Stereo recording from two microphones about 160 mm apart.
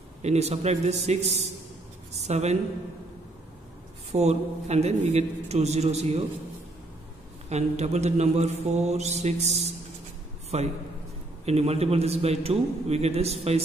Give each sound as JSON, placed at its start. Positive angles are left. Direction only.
{"t": 0.2, "sound": "speech", "side_deg": -40}
{"t": 4.1, "sound": "speech", "side_deg": -45}
{"t": 7.4, "sound": "a man's voice", "side_deg": -45}